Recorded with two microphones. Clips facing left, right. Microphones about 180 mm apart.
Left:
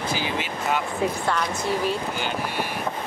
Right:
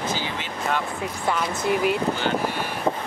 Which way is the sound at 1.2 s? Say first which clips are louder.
Right 1 dB; 5° right (ahead or behind).